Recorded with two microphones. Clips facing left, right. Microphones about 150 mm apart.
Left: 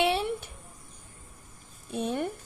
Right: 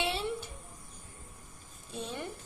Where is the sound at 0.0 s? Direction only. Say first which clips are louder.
Left 8 dB; 60° left (ahead or behind).